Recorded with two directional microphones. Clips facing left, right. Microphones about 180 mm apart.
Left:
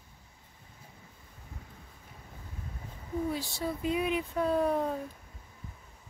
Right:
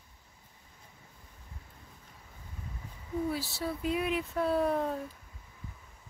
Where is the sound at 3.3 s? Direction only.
5° right (ahead or behind).